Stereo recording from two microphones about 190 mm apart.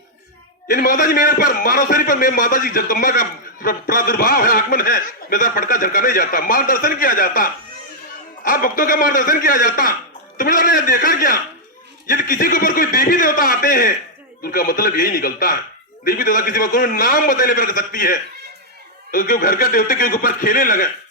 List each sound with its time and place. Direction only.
0.7 s a man's voice: 45° left (ahead or behind)